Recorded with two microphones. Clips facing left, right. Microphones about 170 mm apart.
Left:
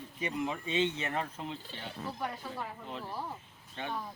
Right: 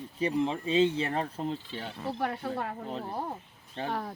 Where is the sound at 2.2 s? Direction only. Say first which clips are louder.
Right 9 dB; 65° right (ahead or behind).